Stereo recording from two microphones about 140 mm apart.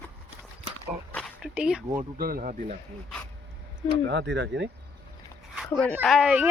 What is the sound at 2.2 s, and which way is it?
Speech, 85° right.